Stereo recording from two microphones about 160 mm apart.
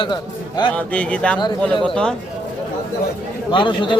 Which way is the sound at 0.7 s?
10° left (ahead or behind).